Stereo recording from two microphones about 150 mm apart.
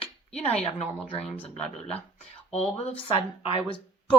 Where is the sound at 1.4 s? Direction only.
45° left (ahead or behind).